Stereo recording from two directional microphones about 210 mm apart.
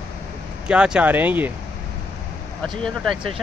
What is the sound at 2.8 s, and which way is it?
Speech, centre (ahead or behind).